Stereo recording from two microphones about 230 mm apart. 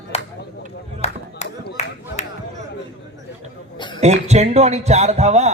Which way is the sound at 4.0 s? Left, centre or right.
Right.